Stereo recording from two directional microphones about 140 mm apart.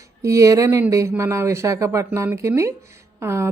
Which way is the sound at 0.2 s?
20° right (ahead or behind).